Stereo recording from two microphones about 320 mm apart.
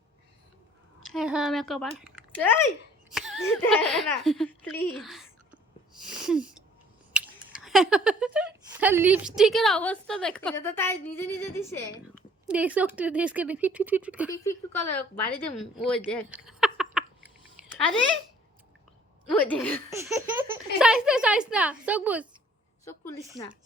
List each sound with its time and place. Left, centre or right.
1.0 s speech: centre
5.9 s sneeze: centre
7.1 s speech: centre
12.5 s speech: centre
14.3 s speech: centre
19.3 s speech: centre
19.9 s speech: centre
22.8 s a woman's voice: centre